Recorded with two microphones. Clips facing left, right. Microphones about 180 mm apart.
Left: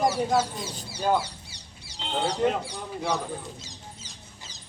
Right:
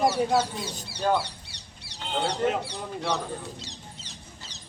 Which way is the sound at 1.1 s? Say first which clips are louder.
Left 1 dB; 65° right (ahead or behind).